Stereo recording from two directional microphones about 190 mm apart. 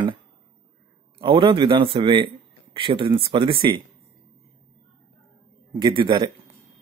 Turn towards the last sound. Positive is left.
turn(degrees=-25)  # may be behind; listen again after turning